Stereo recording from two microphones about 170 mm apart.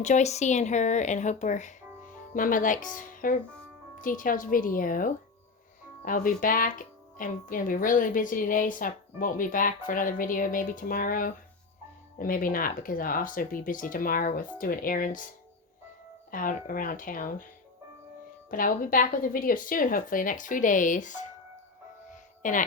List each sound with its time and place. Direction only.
0.0 s speech: 45° left (ahead or behind)
16.3 s speech: 55° left (ahead or behind)
18.5 s speech: 55° left (ahead or behind)
22.1 s music: 50° left (ahead or behind)